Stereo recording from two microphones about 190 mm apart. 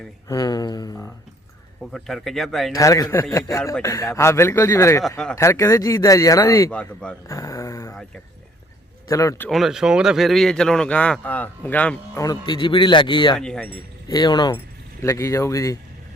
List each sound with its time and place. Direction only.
0.3 s a man's voice: 20° left (ahead or behind)
1.8 s speech: centre (ahead or behind)
2.7 s speech: 15° left (ahead or behind)
5.0 s speech: 5° left (ahead or behind)
5.3 s speech: 15° left (ahead or behind)
9.0 s speech: 15° left (ahead or behind)
9.5 s speech: centre (ahead or behind)
12.2 s a man's voice: 20° left (ahead or behind)
13.3 s speech: 5° left (ahead or behind)
14.1 s a man's voice: 20° left (ahead or behind)